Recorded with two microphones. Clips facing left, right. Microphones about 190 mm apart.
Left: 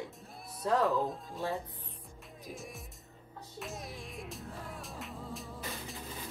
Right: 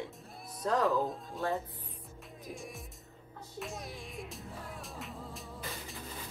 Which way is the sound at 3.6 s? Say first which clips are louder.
Right 1 dB; centre (ahead or behind).